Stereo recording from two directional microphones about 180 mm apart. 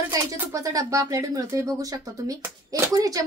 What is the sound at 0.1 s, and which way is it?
A woman's voice, 20° right (ahead or behind).